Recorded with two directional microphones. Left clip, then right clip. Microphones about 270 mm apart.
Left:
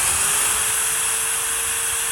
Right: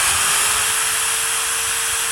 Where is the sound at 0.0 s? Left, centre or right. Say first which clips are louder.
Right 4 dB; centre.